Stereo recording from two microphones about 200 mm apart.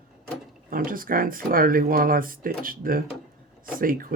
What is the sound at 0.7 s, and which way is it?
Speech, 45° right (ahead or behind).